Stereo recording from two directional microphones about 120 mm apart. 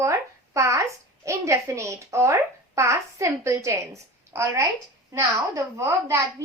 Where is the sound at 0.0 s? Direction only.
25° right (ahead or behind).